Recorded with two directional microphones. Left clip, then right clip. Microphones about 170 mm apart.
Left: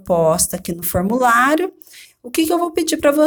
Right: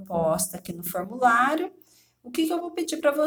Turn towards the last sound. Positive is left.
turn(degrees=45)  # may be behind; listen again after turning